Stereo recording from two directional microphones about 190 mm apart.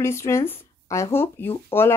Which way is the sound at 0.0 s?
15° left (ahead or behind).